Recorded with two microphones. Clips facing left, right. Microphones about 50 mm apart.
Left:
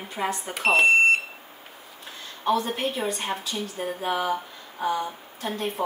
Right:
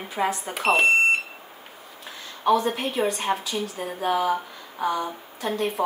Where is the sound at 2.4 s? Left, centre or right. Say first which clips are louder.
Right 3 dB; centre.